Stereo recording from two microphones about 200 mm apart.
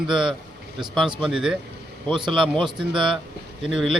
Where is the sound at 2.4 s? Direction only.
Centre (ahead or behind).